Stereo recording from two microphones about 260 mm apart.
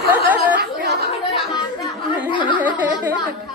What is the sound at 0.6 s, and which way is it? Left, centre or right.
Speech, right.